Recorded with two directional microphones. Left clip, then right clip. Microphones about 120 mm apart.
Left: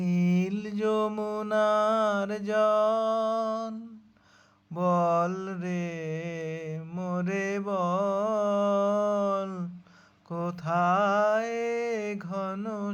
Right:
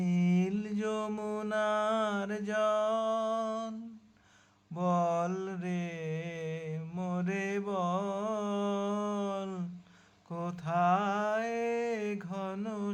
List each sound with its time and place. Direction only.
0.0 s mantra: 35° left (ahead or behind)
4.8 s mantra: 35° left (ahead or behind)